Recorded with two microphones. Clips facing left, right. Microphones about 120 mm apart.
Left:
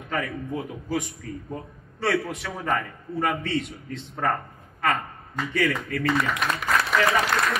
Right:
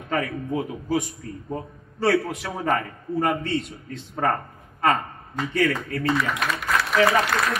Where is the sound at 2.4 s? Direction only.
30° right (ahead or behind).